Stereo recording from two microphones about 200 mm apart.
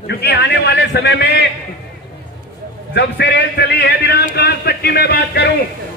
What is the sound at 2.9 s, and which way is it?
A man's voice, 55° left (ahead or behind).